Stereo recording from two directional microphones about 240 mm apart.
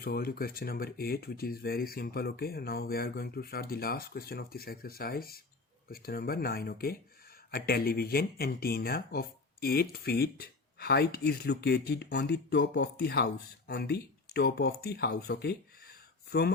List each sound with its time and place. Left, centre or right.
0.0 s speech: left